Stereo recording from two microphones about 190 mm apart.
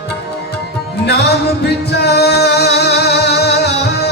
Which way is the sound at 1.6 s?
60° left (ahead or behind).